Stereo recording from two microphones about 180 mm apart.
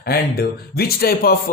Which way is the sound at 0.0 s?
60° left (ahead or behind).